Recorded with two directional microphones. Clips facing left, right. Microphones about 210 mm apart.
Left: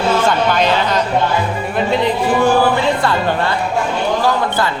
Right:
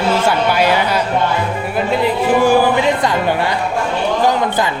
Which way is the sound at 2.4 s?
15° right (ahead or behind).